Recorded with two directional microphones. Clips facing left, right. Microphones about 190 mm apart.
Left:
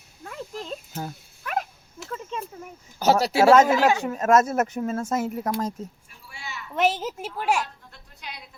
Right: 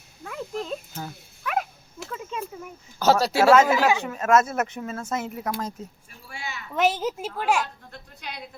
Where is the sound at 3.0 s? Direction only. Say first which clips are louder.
Even; 20° left (ahead or behind).